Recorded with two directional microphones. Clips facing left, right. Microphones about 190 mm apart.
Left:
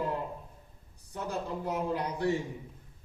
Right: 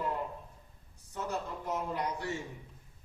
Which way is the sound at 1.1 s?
10° left (ahead or behind).